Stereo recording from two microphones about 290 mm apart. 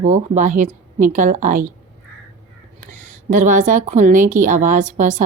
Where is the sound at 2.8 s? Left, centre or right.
Right.